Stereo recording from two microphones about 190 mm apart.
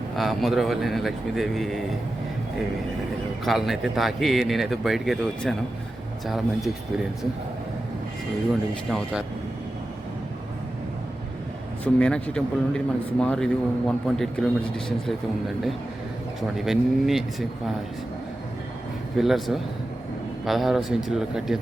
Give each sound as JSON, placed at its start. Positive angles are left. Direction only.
{"t": 0.2, "sound": "speech", "side_deg": 0}
{"t": 3.4, "sound": "speech", "side_deg": 0}
{"t": 11.9, "sound": "speech", "side_deg": 5}
{"t": 16.6, "sound": "speech", "side_deg": 0}
{"t": 19.1, "sound": "speech", "side_deg": 0}